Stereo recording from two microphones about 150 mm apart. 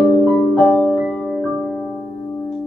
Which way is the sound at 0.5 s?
15° left (ahead or behind).